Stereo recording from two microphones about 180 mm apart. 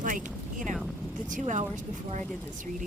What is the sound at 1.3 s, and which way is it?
Speech, 45° right (ahead or behind).